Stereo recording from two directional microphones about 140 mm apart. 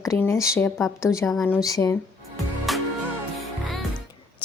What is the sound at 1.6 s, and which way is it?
Speech, 25° left (ahead or behind).